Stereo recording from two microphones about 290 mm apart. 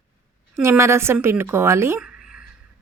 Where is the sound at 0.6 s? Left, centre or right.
Centre.